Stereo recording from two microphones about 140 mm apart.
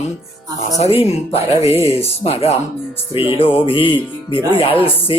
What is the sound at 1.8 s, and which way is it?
Speech, 20° left (ahead or behind).